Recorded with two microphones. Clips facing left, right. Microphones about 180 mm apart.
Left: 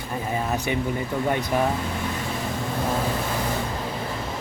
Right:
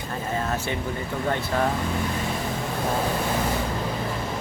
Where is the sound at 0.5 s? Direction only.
15° left (ahead or behind).